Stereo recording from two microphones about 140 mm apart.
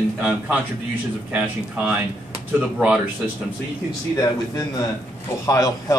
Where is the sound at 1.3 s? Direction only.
10° right (ahead or behind).